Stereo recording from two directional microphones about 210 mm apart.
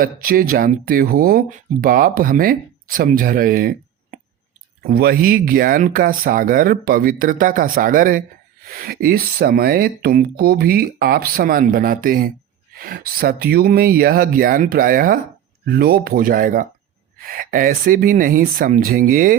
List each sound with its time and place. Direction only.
0.0 s speech: 45° right (ahead or behind)